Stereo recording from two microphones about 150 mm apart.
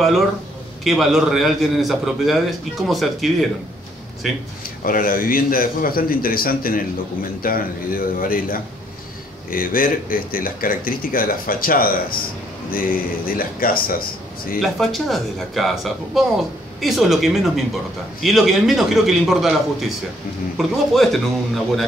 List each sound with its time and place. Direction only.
0.0 s speech: centre (ahead or behind)
4.8 s speech: 70° left (ahead or behind)
14.6 s speech: centre (ahead or behind)
20.5 s speech: centre (ahead or behind)